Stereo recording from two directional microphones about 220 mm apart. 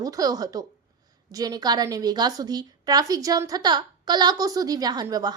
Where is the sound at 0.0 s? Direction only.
15° right (ahead or behind).